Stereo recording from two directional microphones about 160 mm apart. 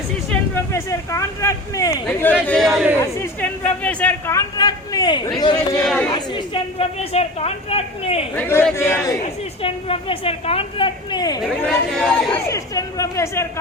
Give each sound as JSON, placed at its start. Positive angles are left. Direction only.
{"t": 0.3, "sound": "speech", "side_deg": 15}
{"t": 2.0, "sound": "speech", "side_deg": 10}
{"t": 3.0, "sound": "speech", "side_deg": 15}
{"t": 5.8, "sound": "speech", "side_deg": 5}
{"t": 6.1, "sound": "a woman's voice", "side_deg": 30}
{"t": 8.4, "sound": "a man's voice", "side_deg": 15}
{"t": 9.2, "sound": "a woman's voice", "side_deg": 35}
{"t": 11.4, "sound": "speech", "side_deg": 0}
{"t": 12.5, "sound": "speech", "side_deg": 20}